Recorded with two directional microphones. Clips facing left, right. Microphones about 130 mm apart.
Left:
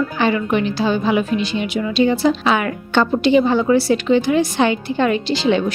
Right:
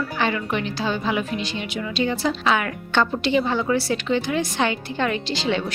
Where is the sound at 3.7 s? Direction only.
10° left (ahead or behind).